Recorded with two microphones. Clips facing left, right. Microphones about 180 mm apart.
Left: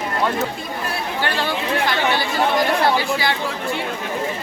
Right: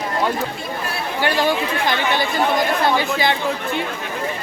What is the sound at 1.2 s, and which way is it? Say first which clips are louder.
Speech: right 6 dB; 15° right (ahead or behind).